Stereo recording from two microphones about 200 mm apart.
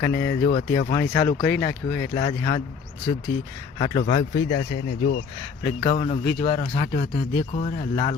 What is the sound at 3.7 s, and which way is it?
Speech, 25° left (ahead or behind).